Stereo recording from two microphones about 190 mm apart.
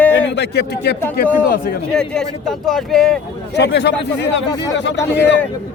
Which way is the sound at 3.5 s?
65° left (ahead or behind).